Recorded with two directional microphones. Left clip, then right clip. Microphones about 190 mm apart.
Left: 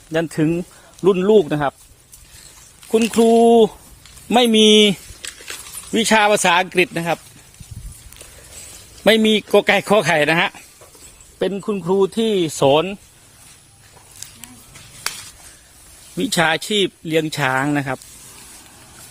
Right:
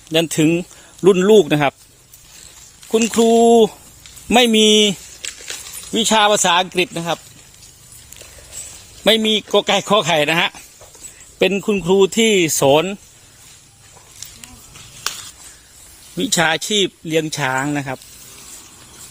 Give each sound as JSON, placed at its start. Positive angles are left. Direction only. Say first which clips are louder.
{"t": 0.1, "sound": "speech", "louder": "right 4 dB", "side_deg": -10}
{"t": 3.2, "sound": "speech", "louder": "right 1 dB", "side_deg": 5}
{"t": 4.6, "sound": "speech", "louder": "left 1 dB", "side_deg": 15}
{"t": 5.2, "sound": "a sound", "louder": "right 3 dB", "side_deg": 60}
{"t": 5.9, "sound": "speech", "louder": "even", "side_deg": 15}
{"t": 9.0, "sound": "speech", "louder": "even", "side_deg": 25}
{"t": 10.2, "sound": "speech", "louder": "even", "side_deg": 10}
{"t": 11.5, "sound": "speech", "louder": "right 4 dB", "side_deg": -15}
{"t": 15.0, "sound": "stir", "louder": "right 2 dB", "side_deg": 55}
{"t": 16.1, "sound": "speech", "louder": "right 1 dB", "side_deg": 0}